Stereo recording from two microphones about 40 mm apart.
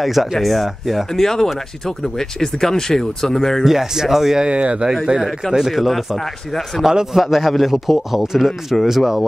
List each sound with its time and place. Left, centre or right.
0.0 s a man's voice: centre
1.2 s speech: centre
3.6 s speech: centre
4.5 s speech: right
5.5 s speech: centre
7.2 s a man's voice: centre
8.4 s a man's voice: centre
8.8 s speech: centre